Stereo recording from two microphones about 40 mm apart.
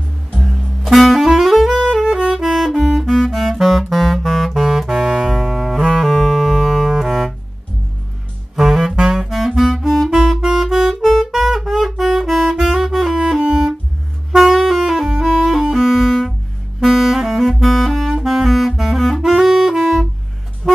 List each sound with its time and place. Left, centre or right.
0.4 s music: centre
4.6 s saxophone: centre
5.3 s music: centre
8.5 s saxophone: centre
9.3 s clarinet: centre
9.8 s music: centre
10.1 s music: centre
12.7 s saxophone: centre
14.3 s saxophone: centre
14.6 s saxophone: centre
14.9 s music: centre
18.8 s saxophone: centre
20.6 s music: centre